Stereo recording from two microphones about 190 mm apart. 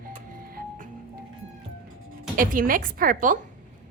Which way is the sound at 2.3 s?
45° right (ahead or behind).